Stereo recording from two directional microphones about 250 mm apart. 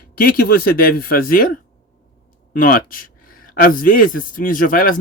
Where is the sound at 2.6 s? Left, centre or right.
Left.